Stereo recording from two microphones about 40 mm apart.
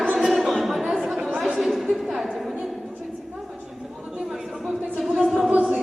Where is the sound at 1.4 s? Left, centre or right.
Centre.